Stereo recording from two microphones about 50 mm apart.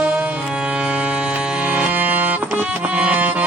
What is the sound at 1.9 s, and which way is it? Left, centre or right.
Music, right.